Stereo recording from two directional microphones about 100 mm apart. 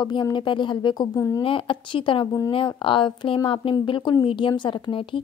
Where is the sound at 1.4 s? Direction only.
60° left (ahead or behind).